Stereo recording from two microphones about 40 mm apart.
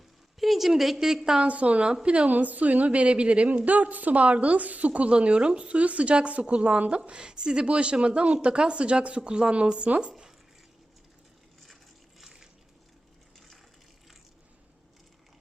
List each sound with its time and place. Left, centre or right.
0.3 s a woman's voice: centre
0.9 s a woman's voice: centre
1.5 s a woman's voice: right
1.9 s a woman's voice: right
2.3 s a woman's voice: right
10.1 s zipper: centre
12.2 s a sound: centre